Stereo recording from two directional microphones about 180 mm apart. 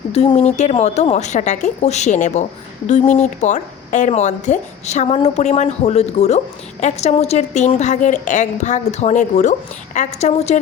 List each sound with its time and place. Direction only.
0.1 s speech: 35° left (ahead or behind)